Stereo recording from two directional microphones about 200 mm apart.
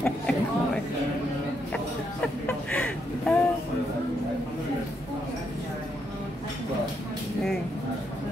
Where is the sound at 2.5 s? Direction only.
5° left (ahead or behind).